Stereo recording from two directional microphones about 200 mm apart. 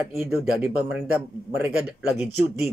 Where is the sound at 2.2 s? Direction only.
Centre (ahead or behind).